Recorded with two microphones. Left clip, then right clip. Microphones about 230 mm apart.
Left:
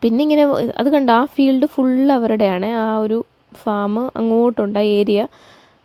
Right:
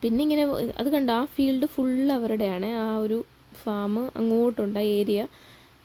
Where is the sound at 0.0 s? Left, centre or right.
Left.